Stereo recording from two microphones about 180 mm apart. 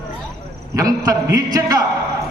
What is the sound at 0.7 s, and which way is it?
A man's voice, 20° right (ahead or behind).